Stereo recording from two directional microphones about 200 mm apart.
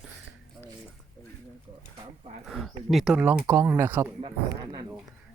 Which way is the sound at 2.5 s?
Centre (ahead or behind).